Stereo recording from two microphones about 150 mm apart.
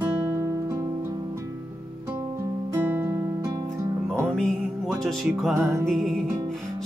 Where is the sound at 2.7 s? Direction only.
15° right (ahead or behind).